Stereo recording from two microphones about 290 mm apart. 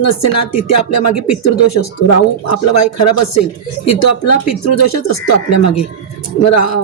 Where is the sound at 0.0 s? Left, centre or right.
Left.